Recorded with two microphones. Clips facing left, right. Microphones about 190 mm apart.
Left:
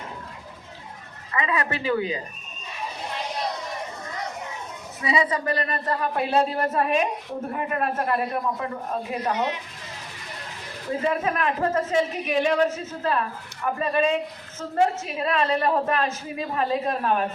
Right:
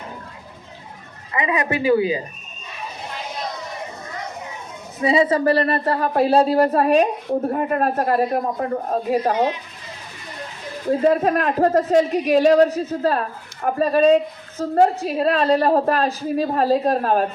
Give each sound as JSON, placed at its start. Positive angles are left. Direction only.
{"t": 1.3, "sound": "speech", "side_deg": -15}
{"t": 4.9, "sound": "speech", "side_deg": -30}
{"t": 10.8, "sound": "speech", "side_deg": -40}